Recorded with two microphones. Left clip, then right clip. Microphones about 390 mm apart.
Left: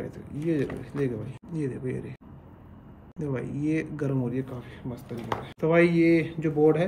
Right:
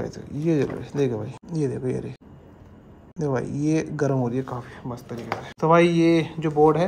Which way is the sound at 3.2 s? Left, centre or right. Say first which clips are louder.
Right 6 dB; centre.